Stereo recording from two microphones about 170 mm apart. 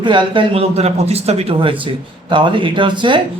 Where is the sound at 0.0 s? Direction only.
30° right (ahead or behind).